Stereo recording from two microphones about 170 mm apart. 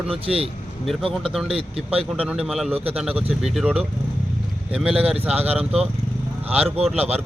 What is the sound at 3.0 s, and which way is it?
Speech, 5° right (ahead or behind).